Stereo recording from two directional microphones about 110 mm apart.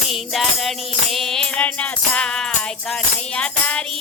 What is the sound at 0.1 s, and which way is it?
Music, centre (ahead or behind).